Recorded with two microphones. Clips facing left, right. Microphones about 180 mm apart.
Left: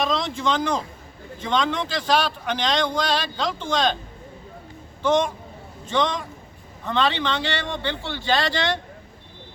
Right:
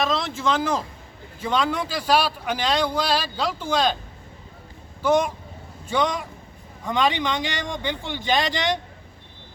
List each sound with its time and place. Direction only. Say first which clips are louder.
0.0 s speech: even; centre (ahead or behind)
5.0 s speech: even; 10° right (ahead or behind)